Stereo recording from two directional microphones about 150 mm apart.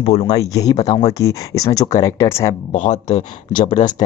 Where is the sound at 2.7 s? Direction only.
50° left (ahead or behind).